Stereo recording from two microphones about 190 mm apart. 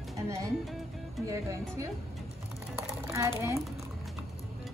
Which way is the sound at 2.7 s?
15° right (ahead or behind).